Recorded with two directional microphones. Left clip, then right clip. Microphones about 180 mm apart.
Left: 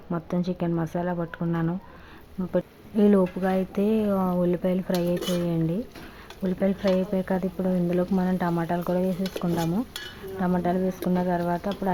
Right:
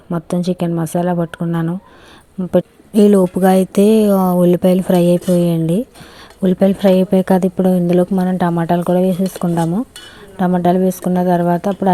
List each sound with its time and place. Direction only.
0.1 s a woman's voice: 35° right (ahead or behind)
2.5 s a woman's voice: 45° right (ahead or behind)